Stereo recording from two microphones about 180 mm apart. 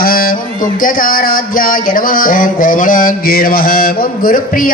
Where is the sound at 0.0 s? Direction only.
55° left (ahead or behind).